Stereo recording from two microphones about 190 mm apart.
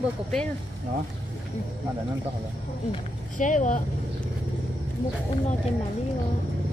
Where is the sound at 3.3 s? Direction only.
45° left (ahead or behind).